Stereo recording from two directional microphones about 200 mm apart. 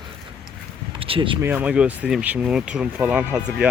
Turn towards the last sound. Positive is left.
turn(degrees=-5)  # may be behind; listen again after turning